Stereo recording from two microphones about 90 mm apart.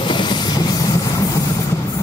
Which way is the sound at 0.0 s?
60° left (ahead or behind).